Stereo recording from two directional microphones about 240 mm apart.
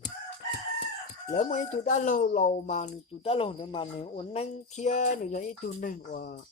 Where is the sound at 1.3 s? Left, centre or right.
Left.